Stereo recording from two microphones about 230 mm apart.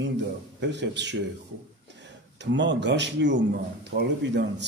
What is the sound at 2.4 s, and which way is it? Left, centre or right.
A man's voice, right.